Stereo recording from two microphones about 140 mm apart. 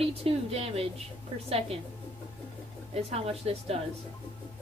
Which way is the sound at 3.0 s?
45° right (ahead or behind).